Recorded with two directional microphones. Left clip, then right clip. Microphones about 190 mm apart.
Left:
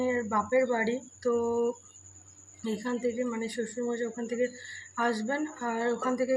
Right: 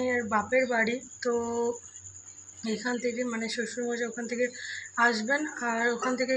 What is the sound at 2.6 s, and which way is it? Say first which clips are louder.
Speech: right 1 dB; 15° left (ahead or behind).